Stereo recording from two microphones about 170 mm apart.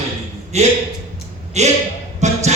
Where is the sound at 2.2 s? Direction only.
40° right (ahead or behind).